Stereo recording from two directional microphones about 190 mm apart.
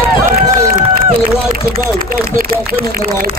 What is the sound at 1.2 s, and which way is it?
Speech, 50° right (ahead or behind).